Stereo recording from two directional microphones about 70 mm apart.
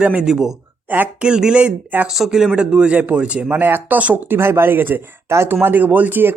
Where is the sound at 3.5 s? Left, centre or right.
Right.